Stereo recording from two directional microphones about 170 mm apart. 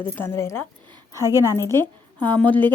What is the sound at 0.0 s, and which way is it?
Speech, 15° left (ahead or behind).